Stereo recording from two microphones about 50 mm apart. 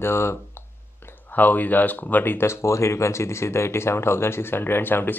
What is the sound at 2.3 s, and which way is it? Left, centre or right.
Speech, left.